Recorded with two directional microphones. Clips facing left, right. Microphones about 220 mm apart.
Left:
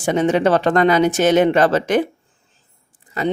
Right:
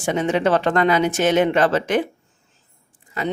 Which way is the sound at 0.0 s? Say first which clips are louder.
Left 3 dB; 40° left (ahead or behind).